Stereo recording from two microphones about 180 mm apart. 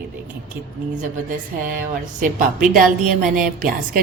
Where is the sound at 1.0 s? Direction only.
50° right (ahead or behind).